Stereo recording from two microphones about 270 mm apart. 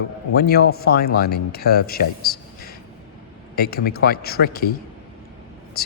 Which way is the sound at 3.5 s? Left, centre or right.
Left.